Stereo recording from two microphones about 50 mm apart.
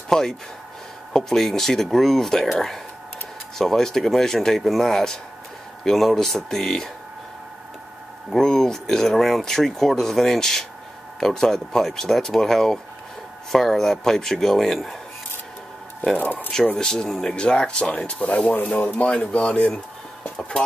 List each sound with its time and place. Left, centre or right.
0.1 s a sound: centre
1.1 s speech: centre
8.3 s speech: centre
16.2 s speech: left
16.5 s speech: centre